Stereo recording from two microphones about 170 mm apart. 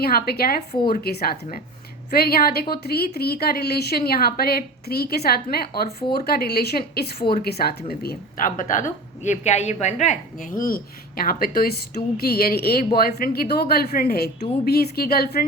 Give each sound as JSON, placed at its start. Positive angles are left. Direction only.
{"t": 0.0, "sound": "speech", "side_deg": 65}
{"t": 0.7, "sound": "speech", "side_deg": 30}
{"t": 0.9, "sound": "speech", "side_deg": 65}